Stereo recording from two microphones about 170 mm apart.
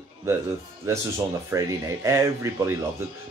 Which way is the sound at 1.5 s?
20° right (ahead or behind).